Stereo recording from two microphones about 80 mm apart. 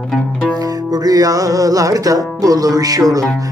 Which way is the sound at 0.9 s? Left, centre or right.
Right.